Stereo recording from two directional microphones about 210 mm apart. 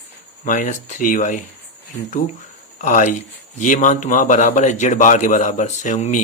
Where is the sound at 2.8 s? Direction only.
40° left (ahead or behind).